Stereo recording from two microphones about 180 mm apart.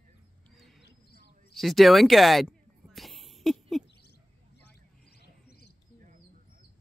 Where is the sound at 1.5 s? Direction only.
Centre (ahead or behind).